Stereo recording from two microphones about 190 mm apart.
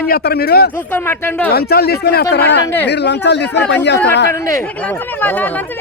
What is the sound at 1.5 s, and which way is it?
Speech, 55° left (ahead or behind).